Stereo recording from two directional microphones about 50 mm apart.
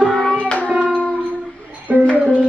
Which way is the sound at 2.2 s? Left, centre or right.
Right.